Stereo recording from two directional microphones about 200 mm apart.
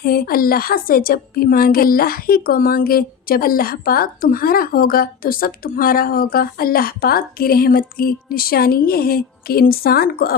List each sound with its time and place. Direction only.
0.0 s a woman's voice: 50° left (ahead or behind)